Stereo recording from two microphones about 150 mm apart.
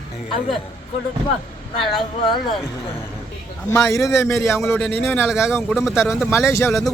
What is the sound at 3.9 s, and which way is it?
A man's voice, 20° left (ahead or behind).